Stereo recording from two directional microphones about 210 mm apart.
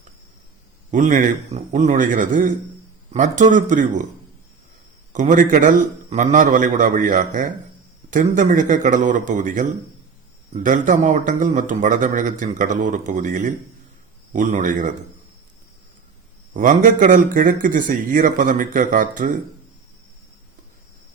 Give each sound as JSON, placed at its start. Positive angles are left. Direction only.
{"t": 0.9, "sound": "a man's voice", "side_deg": -35}
{"t": 5.1, "sound": "a man's voice", "side_deg": -35}
{"t": 16.6, "sound": "a man's voice", "side_deg": -40}